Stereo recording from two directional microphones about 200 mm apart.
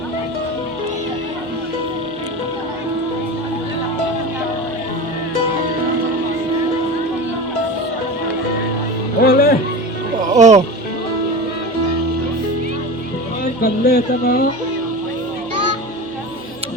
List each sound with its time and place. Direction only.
9.2 s music: 50° left (ahead or behind)
10.3 s music: 35° right (ahead or behind)
13.6 s speech: 55° left (ahead or behind)